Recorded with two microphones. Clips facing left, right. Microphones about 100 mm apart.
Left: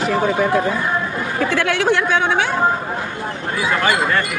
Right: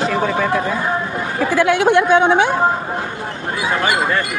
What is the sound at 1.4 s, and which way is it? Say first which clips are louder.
Speech: right 4 dB; 15° right (ahead or behind).